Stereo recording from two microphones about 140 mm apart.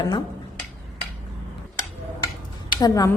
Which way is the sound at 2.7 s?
25° left (ahead or behind).